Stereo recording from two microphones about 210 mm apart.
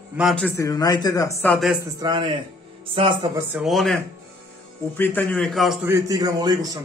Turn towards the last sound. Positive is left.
turn(degrees=-20)  # may be behind; listen again after turning